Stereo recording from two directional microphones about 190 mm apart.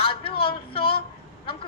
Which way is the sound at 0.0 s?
30° left (ahead or behind).